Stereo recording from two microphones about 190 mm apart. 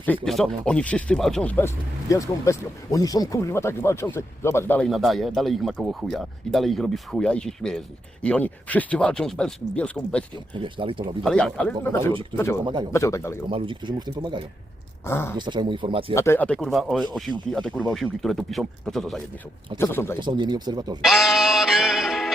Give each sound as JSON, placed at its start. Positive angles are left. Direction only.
{"t": 0.3, "sound": "speech", "side_deg": 0}
{"t": 10.6, "sound": "speech", "side_deg": -25}
{"t": 11.2, "sound": "speech", "side_deg": 5}
{"t": 13.5, "sound": "speech", "side_deg": -25}
{"t": 15.0, "sound": "speech", "side_deg": 10}
{"t": 15.4, "sound": "speech", "side_deg": -25}
{"t": 16.1, "sound": "speech", "side_deg": 15}
{"t": 19.8, "sound": "speech", "side_deg": 15}
{"t": 20.1, "sound": "speech", "side_deg": -25}
{"t": 21.0, "sound": "music", "side_deg": 0}